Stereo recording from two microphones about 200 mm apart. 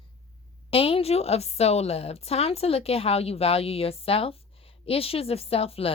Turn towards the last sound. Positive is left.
turn(degrees=30)  # may be behind; listen again after turning